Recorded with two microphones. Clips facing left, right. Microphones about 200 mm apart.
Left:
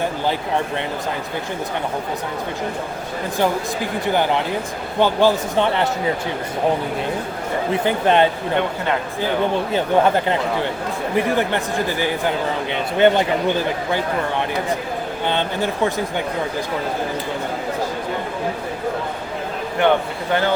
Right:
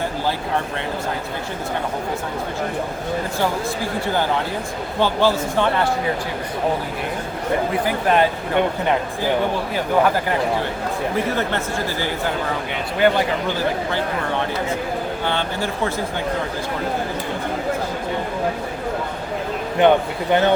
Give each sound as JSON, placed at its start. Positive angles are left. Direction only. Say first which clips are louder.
{"t": 4.0, "sound": "a man's voice", "louder": "left 3 dB", "side_deg": 15}
{"t": 7.9, "sound": "speech", "louder": "left 3 dB", "side_deg": 25}
{"t": 9.7, "sound": "speech", "louder": "left 2 dB", "side_deg": 25}
{"t": 11.3, "sound": "a man's voice", "louder": "left 2 dB", "side_deg": 15}
{"t": 15.3, "sound": "speech", "louder": "left 5 dB", "side_deg": 20}
{"t": 19.8, "sound": "a man's voice", "louder": "right 2 dB", "side_deg": -20}